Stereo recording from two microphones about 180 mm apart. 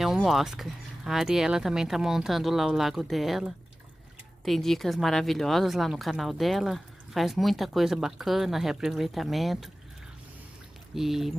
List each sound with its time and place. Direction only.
0.0 s speech: centre (ahead or behind)
11.0 s speech: centre (ahead or behind)